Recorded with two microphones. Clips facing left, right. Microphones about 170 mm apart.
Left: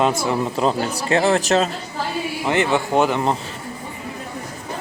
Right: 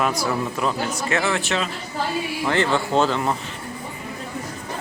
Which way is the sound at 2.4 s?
20° left (ahead or behind).